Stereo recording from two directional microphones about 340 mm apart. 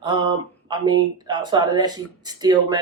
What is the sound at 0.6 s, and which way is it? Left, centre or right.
Speech, centre.